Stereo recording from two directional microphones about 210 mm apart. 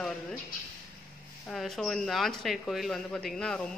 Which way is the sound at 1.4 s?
Centre (ahead or behind).